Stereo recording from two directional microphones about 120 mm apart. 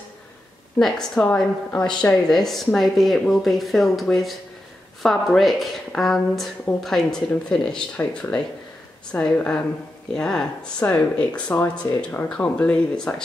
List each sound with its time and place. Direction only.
0.7 s speech: 5° left (ahead or behind)